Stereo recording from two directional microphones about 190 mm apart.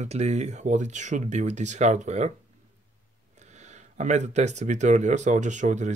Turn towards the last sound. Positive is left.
turn(degrees=-40)  # may be behind; listen again after turning